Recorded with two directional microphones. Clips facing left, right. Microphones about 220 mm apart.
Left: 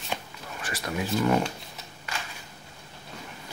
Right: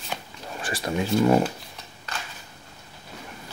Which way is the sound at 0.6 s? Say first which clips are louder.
Right 4 dB; 30° right (ahead or behind).